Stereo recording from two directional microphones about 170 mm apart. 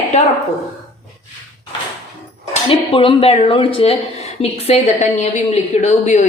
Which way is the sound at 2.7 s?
30° left (ahead or behind).